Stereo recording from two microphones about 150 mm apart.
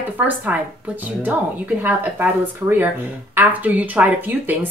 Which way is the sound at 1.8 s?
15° right (ahead or behind).